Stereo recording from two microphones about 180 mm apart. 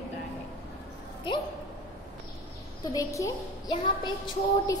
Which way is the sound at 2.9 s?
20° left (ahead or behind).